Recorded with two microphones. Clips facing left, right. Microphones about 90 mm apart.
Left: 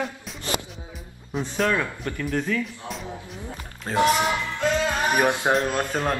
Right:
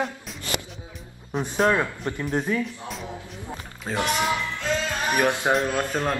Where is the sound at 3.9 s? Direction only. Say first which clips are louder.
Left 4 dB; centre (ahead or behind).